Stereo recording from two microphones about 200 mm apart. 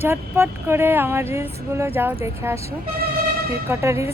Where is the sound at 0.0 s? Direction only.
10° right (ahead or behind).